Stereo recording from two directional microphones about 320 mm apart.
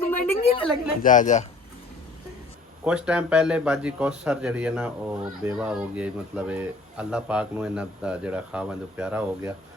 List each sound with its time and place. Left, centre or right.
0.0 s a sound: centre
1.0 s speech: left
2.8 s speech: centre